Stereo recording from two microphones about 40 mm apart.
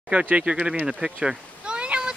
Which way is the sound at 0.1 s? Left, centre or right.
Right.